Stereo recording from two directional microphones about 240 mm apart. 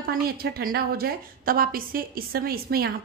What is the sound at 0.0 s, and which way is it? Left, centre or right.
A woman's voice, right.